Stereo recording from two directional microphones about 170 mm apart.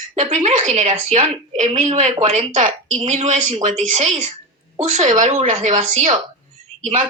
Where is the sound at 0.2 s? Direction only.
40° right (ahead or behind).